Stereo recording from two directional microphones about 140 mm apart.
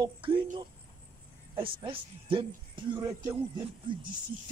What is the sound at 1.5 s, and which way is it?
Speech, 35° right (ahead or behind).